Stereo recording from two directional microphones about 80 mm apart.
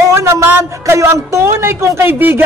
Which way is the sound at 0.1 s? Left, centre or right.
Right.